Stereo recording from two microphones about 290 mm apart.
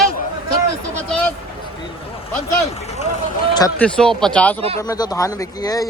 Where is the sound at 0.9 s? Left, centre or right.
Centre.